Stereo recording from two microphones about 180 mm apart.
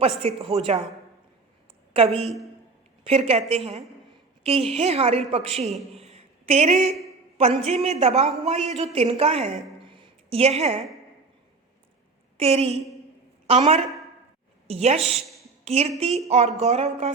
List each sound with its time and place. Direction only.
0.2 s a man's voice: 30° right (ahead or behind)
1.9 s a woman's voice: 35° right (ahead or behind)
6.0 s a sound: 35° right (ahead or behind)
7.3 s a man's voice: 35° right (ahead or behind)
9.8 s a sound: 30° right (ahead or behind)
12.4 s a man's voice: 35° right (ahead or behind)